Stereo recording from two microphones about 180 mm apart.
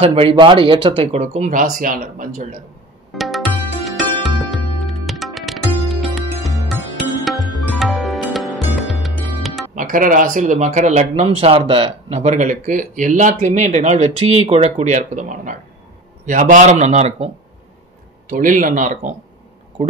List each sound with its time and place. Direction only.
0.0 s speech: 30° right (ahead or behind); by 2.4 s 45° right (ahead or behind)
3.2 s music: centre (ahead or behind)
9.8 s a man's voice: 50° right (ahead or behind)
18.3 s a man's voice: 45° right (ahead or behind)